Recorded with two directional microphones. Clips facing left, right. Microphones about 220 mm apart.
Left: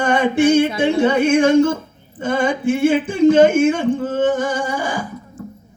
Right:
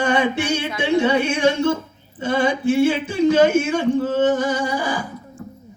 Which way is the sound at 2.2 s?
50° left (ahead or behind).